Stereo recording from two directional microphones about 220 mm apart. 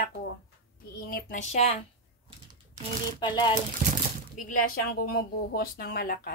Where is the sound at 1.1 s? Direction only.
35° left (ahead or behind).